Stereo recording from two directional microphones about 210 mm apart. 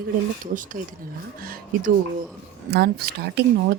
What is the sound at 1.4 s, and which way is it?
Speech, 45° right (ahead or behind).